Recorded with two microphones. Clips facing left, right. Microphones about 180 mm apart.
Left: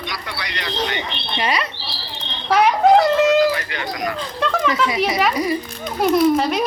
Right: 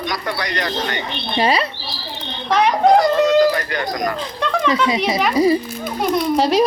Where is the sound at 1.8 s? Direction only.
45° right (ahead or behind).